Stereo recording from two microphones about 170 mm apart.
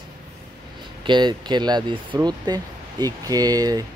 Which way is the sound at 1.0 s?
25° right (ahead or behind).